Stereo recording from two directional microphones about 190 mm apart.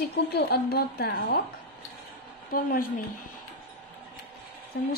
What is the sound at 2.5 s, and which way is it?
Speech, 50° left (ahead or behind).